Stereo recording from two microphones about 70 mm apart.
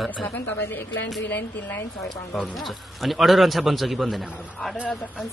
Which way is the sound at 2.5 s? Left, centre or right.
Centre.